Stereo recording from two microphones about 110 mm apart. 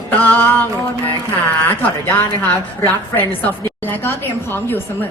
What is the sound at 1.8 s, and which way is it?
A woman's voice, 15° left (ahead or behind).